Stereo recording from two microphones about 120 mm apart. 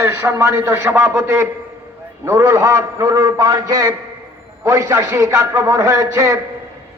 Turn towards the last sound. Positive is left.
turn(degrees=-25)  # may be behind; listen again after turning